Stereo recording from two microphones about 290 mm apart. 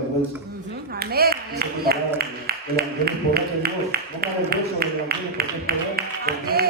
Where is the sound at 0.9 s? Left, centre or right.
Right.